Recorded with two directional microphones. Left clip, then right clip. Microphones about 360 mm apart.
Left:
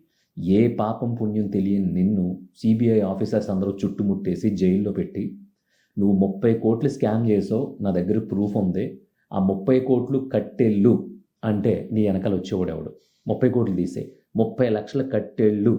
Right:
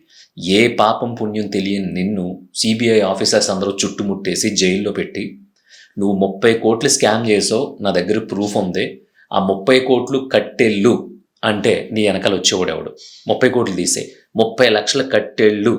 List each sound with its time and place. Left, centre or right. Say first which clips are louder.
0.3 s speech: right 8 dB; centre
6.0 s speech: right 6 dB; centre
6.4 s speech: right 8 dB; centre